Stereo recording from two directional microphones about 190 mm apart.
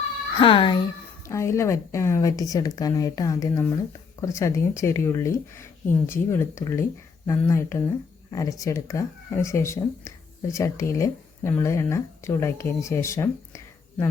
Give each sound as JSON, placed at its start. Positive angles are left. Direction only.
{"t": 0.3, "sound": "a child's voice", "side_deg": 25}
{"t": 1.3, "sound": "speech", "side_deg": 15}